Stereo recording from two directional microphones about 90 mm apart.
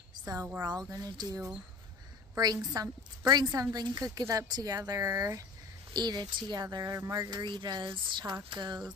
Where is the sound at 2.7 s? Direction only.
50° right (ahead or behind).